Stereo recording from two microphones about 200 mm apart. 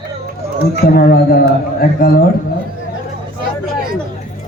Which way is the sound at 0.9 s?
50° left (ahead or behind).